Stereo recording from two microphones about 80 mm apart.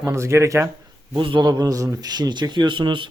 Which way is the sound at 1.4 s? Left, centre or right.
Right.